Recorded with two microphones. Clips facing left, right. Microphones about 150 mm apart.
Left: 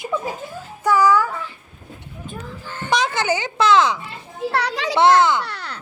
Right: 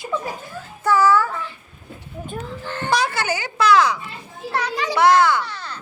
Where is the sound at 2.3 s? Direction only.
65° right (ahead or behind).